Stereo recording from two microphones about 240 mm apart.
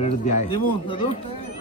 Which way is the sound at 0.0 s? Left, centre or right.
Left.